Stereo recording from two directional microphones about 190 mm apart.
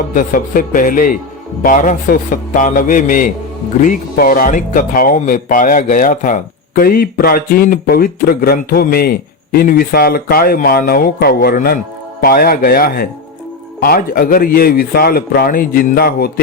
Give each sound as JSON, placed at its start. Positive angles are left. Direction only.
{"t": 0.1, "sound": "speech", "side_deg": 45}